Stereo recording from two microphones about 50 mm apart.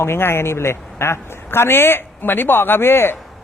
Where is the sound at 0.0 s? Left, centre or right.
Left.